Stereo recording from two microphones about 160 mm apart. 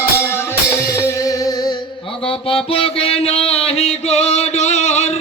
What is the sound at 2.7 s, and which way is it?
Music, 35° left (ahead or behind).